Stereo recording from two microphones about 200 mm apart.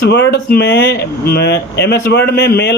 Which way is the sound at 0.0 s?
55° left (ahead or behind).